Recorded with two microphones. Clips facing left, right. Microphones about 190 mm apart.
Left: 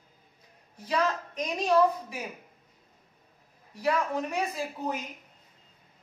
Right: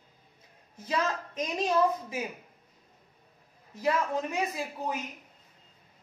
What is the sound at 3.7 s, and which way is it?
Speech, 20° right (ahead or behind).